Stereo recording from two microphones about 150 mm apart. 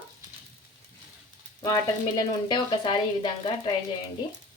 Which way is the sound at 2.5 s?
30° left (ahead or behind).